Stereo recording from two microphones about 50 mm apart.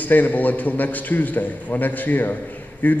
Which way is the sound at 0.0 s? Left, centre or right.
Left.